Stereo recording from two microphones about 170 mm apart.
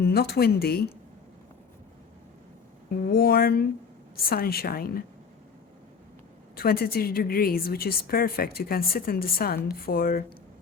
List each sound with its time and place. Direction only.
0.0 s a woman's voice: 70° left (ahead or behind)
3.1 s speech: 65° left (ahead or behind)
6.6 s speech: 60° left (ahead or behind)